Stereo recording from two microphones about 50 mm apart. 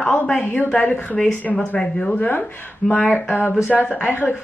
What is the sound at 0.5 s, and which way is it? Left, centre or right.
Speech, left.